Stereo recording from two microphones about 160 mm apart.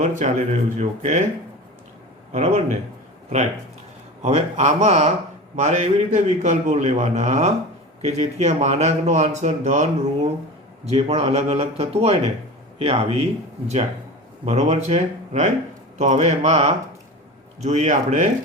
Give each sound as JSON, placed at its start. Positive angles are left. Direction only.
{"t": 0.0, "sound": "speech", "side_deg": -50}
{"t": 2.3, "sound": "speech", "side_deg": -45}
{"t": 4.2, "sound": "a man's voice", "side_deg": -45}
{"t": 14.4, "sound": "speech", "side_deg": -45}